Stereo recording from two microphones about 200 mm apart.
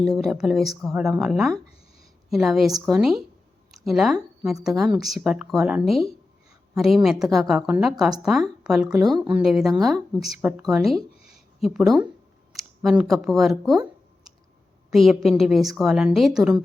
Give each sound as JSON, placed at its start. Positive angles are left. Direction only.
{"t": 0.2, "sound": "speech", "side_deg": 0}
{"t": 14.8, "sound": "speech", "side_deg": 0}